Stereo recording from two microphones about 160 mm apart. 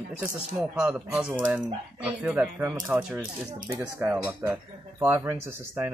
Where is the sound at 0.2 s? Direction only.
5° right (ahead or behind).